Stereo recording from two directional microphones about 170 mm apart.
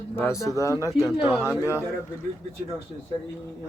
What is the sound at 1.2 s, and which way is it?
Speech, 10° right (ahead or behind).